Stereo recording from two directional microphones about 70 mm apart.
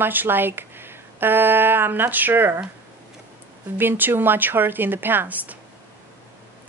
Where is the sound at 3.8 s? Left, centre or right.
Right.